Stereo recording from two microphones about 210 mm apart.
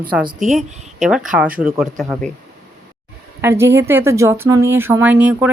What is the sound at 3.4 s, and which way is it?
Speech, 10° right (ahead or behind).